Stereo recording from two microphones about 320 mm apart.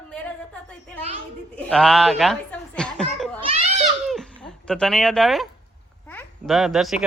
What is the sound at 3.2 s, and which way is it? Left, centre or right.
Children playing, centre.